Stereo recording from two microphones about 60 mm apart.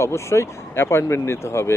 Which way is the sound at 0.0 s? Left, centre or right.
Left.